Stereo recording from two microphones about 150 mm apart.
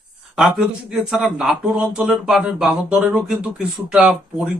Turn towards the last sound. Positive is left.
turn(degrees=-5)  # may be behind; listen again after turning